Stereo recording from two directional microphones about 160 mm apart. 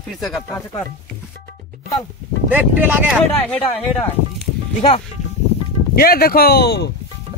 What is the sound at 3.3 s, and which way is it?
Speech, 10° left (ahead or behind).